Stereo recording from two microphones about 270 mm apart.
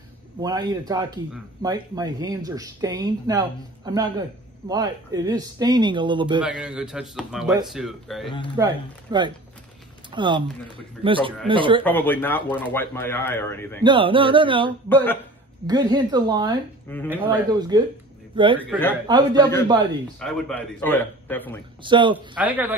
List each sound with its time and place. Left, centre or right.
0.4 s speech: centre
6.4 s speech: centre
8.5 s speech: centre
11.1 s a sound: centre
11.8 s speech: centre
13.8 s a sound: centre
15.6 s a man's voice: centre
20.2 s speech: centre
21.8 s speech: centre
22.1 s speech: centre